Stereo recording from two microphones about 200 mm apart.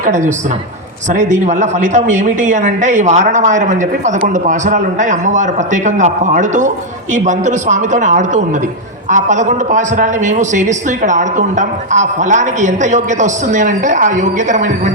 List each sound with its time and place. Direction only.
0.0 s a man's voice: 40° right (ahead or behind)